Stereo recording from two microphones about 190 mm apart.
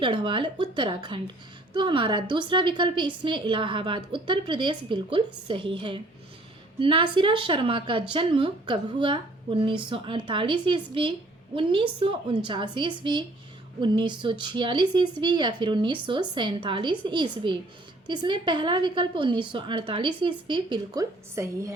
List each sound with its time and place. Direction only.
0.0 s speech: 25° right (ahead or behind)